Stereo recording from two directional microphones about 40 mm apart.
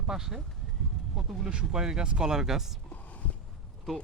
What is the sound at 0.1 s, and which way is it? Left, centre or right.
Speech, centre.